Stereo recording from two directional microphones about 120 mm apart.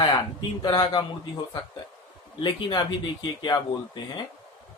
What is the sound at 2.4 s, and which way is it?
Speech, 40° left (ahead or behind).